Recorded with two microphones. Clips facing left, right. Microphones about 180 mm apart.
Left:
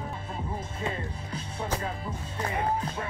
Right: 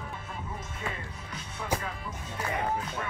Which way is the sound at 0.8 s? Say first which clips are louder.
Left 5 dB; 30° left (ahead or behind).